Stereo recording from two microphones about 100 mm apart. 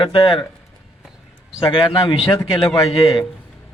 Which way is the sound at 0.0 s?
55° left (ahead or behind).